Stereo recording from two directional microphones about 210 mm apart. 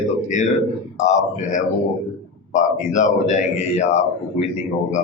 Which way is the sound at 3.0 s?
35° left (ahead or behind).